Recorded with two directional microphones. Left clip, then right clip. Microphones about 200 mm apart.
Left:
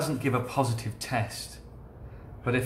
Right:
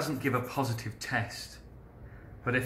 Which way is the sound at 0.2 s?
20° left (ahead or behind).